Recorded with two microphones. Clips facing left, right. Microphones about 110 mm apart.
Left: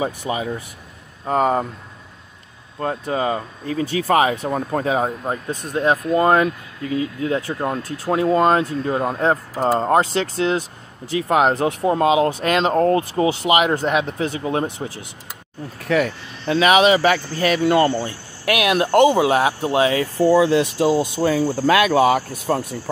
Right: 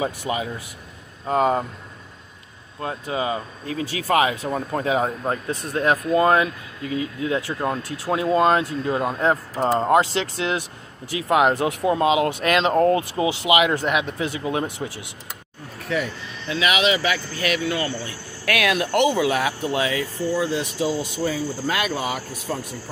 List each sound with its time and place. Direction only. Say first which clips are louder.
0.2 s speech: even; 20° left (ahead or behind)
1.3 s speech: left 2 dB; 40° left (ahead or behind)
2.8 s speech: left 4 dB; 40° left (ahead or behind)
5.3 s speech: left 1 dB; 15° left (ahead or behind)
6.1 s speech: left 2 dB; 30° left (ahead or behind)
15.9 s speech: left 6 dB; 55° left (ahead or behind)
18.4 s speech: left 3 dB; 25° left (ahead or behind)
20.2 s speech: left 9 dB; 90° left; by 21.0 s 65° left (ahead or behind)
21.0 s speech: left 6 dB; 55° left (ahead or behind); by 22.2 s 70° left (ahead or behind)